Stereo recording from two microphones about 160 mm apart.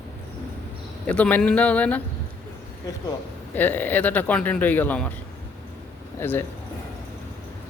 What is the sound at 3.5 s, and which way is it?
Speech, 10° left (ahead or behind).